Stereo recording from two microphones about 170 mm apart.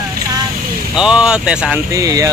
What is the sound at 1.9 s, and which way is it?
Speech, 20° right (ahead or behind).